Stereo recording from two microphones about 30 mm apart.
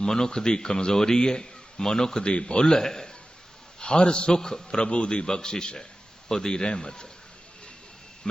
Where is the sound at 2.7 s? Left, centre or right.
Centre.